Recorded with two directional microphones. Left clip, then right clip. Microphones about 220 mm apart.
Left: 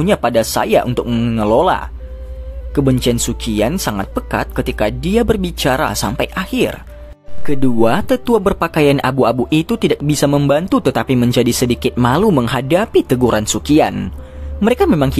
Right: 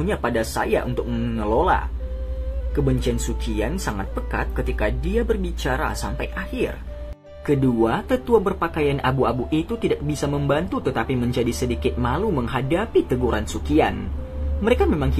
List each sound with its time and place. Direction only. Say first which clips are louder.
0.0 s speech: left 9 dB; 50° left (ahead or behind)